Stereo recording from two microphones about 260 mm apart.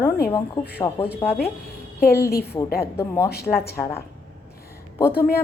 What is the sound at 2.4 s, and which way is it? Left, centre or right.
A woman's voice, centre.